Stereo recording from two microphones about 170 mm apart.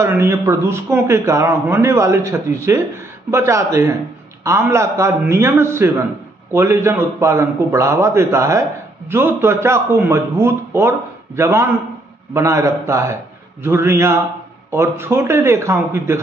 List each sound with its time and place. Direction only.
0.0 s a man's voice: 15° right (ahead or behind)